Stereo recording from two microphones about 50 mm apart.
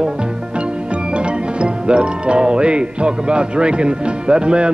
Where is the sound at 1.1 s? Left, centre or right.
Right.